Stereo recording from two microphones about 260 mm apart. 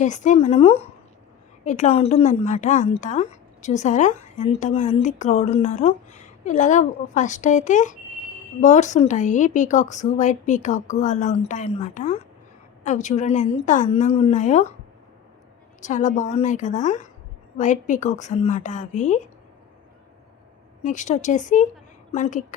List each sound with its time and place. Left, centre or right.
0.0 s a woman's voice: left
15.8 s a woman's voice: left
20.8 s a woman's voice: left